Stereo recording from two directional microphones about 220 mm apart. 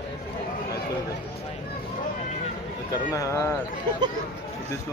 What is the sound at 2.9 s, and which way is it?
Speech, 15° left (ahead or behind).